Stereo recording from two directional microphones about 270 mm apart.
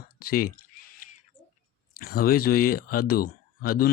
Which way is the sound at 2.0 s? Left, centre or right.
Left.